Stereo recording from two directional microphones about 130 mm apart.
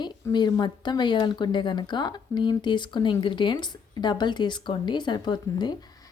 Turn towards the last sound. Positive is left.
turn(degrees=35)  # may be behind; listen again after turning